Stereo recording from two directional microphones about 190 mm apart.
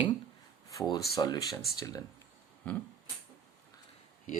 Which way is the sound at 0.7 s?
20° left (ahead or behind).